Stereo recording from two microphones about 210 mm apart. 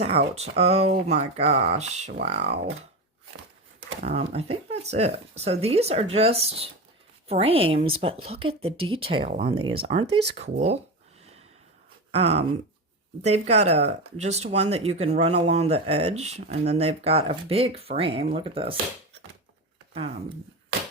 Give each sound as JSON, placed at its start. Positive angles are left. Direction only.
{"t": 0.3, "sound": "speech", "side_deg": -30}
{"t": 4.0, "sound": "speech", "side_deg": -30}
{"t": 12.1, "sound": "speech", "side_deg": -30}